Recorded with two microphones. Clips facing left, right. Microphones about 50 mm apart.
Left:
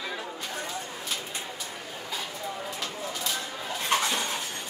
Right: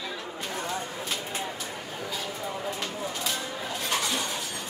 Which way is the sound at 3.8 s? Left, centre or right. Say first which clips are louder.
Left 4 dB; left.